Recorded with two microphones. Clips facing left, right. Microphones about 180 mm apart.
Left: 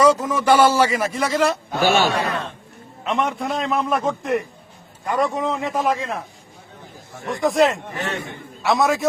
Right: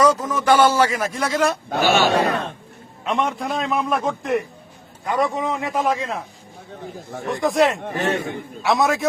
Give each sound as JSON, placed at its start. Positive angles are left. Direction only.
{"t": 0.0, "sound": "speech", "side_deg": 10}
{"t": 2.0, "sound": "a man's voice", "side_deg": -40}
{"t": 2.3, "sound": "chatter", "side_deg": -55}
{"t": 3.0, "sound": "a man's voice", "side_deg": 0}
{"t": 7.3, "sound": "a man's voice", "side_deg": 0}